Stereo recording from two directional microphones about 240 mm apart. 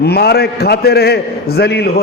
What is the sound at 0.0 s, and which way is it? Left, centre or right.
A man's voice, left.